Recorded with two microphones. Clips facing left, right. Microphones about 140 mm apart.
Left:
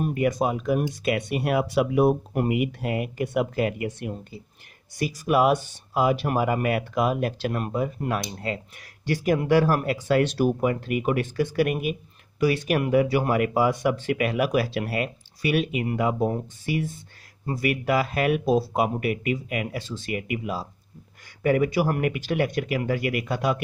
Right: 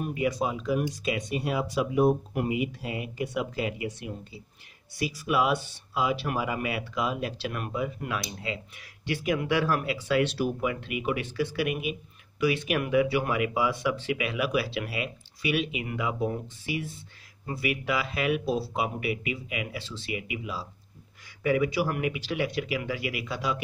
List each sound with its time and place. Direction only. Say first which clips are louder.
0.0 s speech: left 4 dB; 50° left (ahead or behind)
7.5 s speech: left 5 dB; 40° left (ahead or behind)